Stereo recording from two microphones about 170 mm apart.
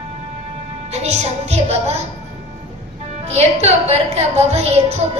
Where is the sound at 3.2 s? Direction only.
40° right (ahead or behind).